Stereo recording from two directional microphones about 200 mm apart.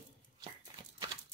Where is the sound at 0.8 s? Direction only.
20° right (ahead or behind).